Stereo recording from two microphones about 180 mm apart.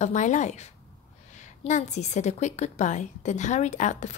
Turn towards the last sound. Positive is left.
turn(degrees=40)  # may be behind; listen again after turning